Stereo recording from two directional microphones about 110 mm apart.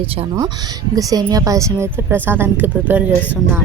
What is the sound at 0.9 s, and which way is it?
A woman's voice, 35° right (ahead or behind).